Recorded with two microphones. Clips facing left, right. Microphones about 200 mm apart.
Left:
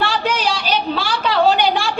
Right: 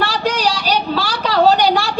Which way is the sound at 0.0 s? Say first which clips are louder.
Right 2 dB; 40° right (ahead or behind).